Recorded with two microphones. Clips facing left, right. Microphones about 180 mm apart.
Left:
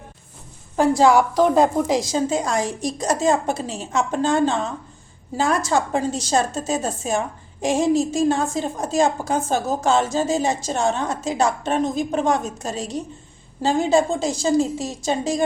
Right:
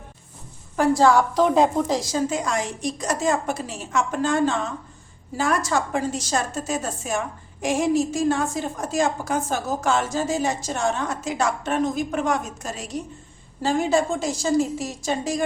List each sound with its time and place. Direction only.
0.8 s a woman's voice: 15° left (ahead or behind)
1.3 s a woman's voice: centre (ahead or behind)
1.9 s a woman's voice: 20° left (ahead or behind)